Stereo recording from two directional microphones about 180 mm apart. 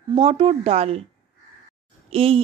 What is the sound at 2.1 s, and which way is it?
Speech, 30° right (ahead or behind).